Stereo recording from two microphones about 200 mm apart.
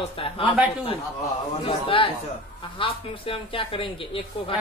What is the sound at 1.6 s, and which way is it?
Speech, 25° left (ahead or behind).